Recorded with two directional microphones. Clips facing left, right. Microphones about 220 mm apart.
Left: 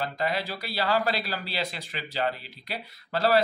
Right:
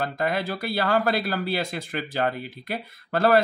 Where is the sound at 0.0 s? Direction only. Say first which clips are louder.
Right 3 dB; 50° right (ahead or behind).